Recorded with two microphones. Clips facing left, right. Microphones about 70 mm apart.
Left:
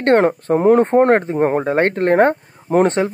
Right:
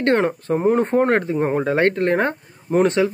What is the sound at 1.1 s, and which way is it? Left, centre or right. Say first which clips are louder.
Speech: left 4 dB; left.